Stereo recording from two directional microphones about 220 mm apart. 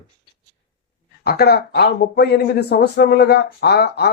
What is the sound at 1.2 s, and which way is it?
Speech, 45° left (ahead or behind).